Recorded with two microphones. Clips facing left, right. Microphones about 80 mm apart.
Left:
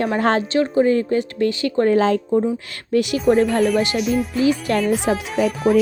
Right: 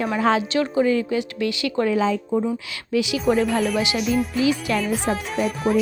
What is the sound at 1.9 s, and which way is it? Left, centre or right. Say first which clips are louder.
Speech: left 6 dB; left.